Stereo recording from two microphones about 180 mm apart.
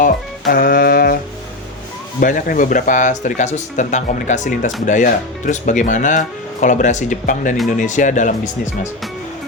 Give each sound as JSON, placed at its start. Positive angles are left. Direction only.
{"t": 0.0, "sound": "music", "side_deg": 50}
{"t": 2.2, "sound": "speech", "side_deg": 50}